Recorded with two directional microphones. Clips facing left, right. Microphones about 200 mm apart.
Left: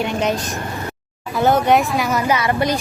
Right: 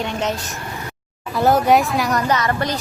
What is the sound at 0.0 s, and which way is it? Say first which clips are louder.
Speech: left 3 dB; 10° left (ahead or behind).